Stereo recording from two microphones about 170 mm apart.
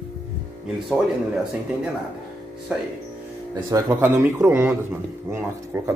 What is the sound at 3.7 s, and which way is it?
Speech, 20° right (ahead or behind).